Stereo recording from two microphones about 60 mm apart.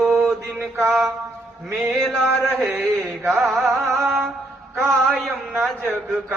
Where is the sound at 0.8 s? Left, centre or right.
Right.